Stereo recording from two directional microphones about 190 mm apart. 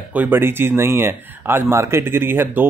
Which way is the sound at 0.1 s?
10° right (ahead or behind).